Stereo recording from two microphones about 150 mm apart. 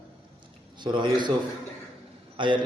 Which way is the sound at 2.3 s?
30° right (ahead or behind).